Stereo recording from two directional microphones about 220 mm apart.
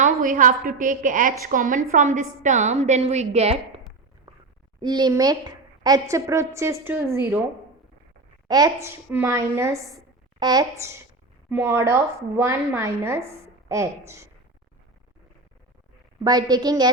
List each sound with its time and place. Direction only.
0.0 s a woman's voice: 40° right (ahead or behind)
4.8 s a woman's voice: 20° right (ahead or behind)
8.4 s a woman's voice: 15° right (ahead or behind)
16.2 s a woman's voice: 15° right (ahead or behind)